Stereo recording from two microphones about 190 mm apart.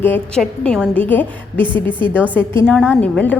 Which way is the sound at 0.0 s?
5° left (ahead or behind).